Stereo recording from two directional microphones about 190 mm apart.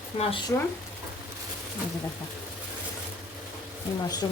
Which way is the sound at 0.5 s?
15° left (ahead or behind).